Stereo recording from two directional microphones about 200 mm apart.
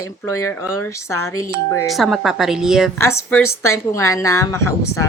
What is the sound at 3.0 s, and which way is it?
Speech, 15° left (ahead or behind).